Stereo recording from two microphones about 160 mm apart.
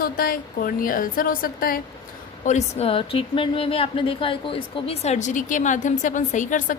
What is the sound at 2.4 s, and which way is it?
A woman's voice, 45° left (ahead or behind).